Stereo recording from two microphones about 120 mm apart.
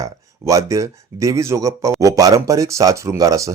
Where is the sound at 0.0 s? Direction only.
30° right (ahead or behind).